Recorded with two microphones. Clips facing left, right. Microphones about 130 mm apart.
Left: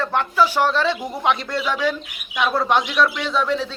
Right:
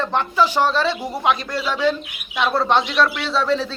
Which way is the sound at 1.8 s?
10° left (ahead or behind).